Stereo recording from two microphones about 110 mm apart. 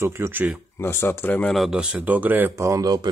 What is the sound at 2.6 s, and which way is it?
Speech, 35° right (ahead or behind).